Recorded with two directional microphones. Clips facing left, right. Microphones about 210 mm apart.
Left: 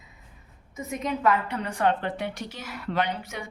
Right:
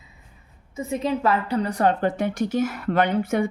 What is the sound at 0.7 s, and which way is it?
A woman's voice, 30° right (ahead or behind).